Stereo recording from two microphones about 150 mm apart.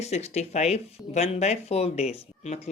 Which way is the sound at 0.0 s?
45° left (ahead or behind).